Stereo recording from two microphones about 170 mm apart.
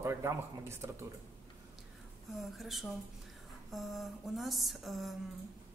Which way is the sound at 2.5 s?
Centre (ahead or behind).